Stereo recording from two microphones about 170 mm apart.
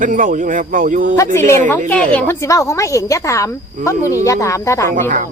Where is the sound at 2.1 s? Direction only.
15° left (ahead or behind).